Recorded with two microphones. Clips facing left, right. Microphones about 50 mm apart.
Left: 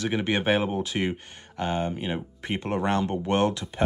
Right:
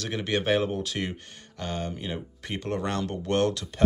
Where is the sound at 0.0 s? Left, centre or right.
Centre.